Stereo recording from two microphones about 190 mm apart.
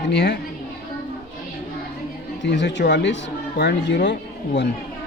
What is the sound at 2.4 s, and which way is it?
Speech, 65° left (ahead or behind).